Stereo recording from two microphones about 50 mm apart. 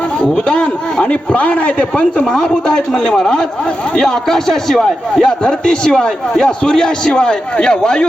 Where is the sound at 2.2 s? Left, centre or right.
Centre.